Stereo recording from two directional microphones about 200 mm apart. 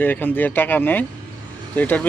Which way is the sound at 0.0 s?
10° left (ahead or behind).